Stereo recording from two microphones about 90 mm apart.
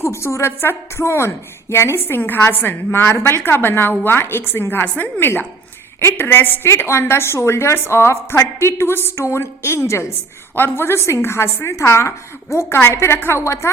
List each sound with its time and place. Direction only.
0.0 s a woman's voice: 30° left (ahead or behind)